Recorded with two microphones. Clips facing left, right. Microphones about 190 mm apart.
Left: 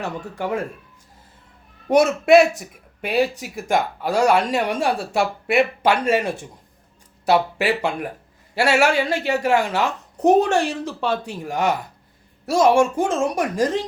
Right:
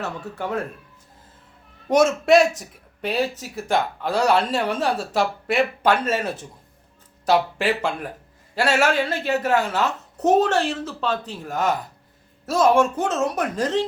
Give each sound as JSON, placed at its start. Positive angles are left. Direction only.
{"t": 0.0, "sound": "speech", "side_deg": 10}
{"t": 2.2, "sound": "speech", "side_deg": 10}